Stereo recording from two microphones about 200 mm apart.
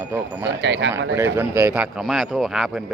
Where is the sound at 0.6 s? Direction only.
65° right (ahead or behind).